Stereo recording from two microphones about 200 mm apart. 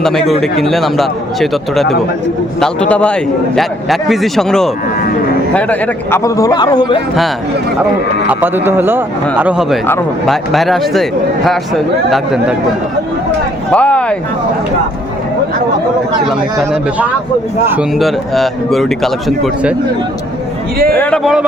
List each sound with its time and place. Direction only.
0.0 s a man's voice: centre (ahead or behind); by 7.0 s 20° left (ahead or behind)
8.3 s a man's voice: 10° right (ahead or behind)
9.8 s a man's voice: 10° left (ahead or behind)
13.7 s a man's voice: 5° left (ahead or behind)
17.7 s a man's voice: 5° right (ahead or behind)
20.9 s a man's voice: 10° left (ahead or behind)